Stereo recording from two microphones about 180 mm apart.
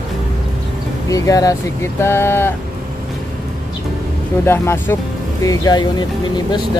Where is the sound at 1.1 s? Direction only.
20° left (ahead or behind).